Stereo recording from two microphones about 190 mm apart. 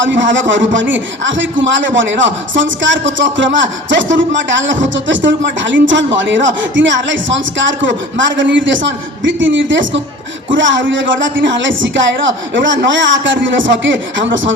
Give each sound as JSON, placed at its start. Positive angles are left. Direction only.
{"t": 0.0, "sound": "a man's voice", "side_deg": -75}